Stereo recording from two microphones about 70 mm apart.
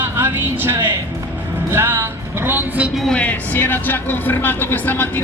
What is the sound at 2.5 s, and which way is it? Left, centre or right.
Speech, right.